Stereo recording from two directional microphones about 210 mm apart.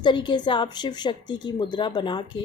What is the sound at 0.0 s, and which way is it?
Speech, 20° left (ahead or behind).